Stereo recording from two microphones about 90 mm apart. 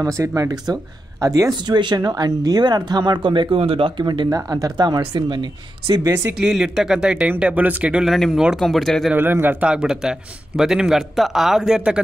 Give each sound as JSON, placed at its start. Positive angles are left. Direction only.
{"t": 0.0, "sound": "speech", "side_deg": -35}
{"t": 1.6, "sound": "speech", "side_deg": -60}
{"t": 4.0, "sound": "speech", "side_deg": -60}
{"t": 4.5, "sound": "speech", "side_deg": -45}
{"t": 5.9, "sound": "speech", "side_deg": -40}
{"t": 6.4, "sound": "speech", "side_deg": -10}
{"t": 8.0, "sound": "a man's voice", "side_deg": 0}
{"t": 9.1, "sound": "a man's voice", "side_deg": -25}
{"t": 9.7, "sound": "a man's voice", "side_deg": -10}